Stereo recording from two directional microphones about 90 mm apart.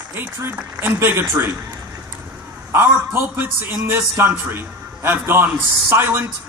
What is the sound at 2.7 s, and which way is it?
A man's voice, 25° right (ahead or behind).